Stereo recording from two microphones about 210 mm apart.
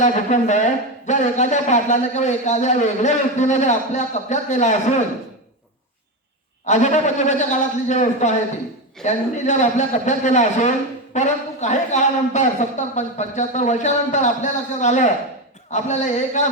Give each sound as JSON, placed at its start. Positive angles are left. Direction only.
{"t": 0.0, "sound": "speech", "side_deg": 35}
{"t": 6.7, "sound": "speech", "side_deg": 35}